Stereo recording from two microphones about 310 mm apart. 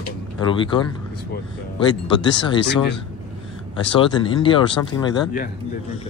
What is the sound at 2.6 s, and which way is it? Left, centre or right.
Speech, left.